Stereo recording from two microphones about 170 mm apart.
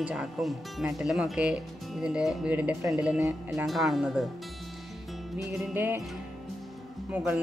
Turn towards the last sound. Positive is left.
turn(degrees=-10)  # may be behind; listen again after turning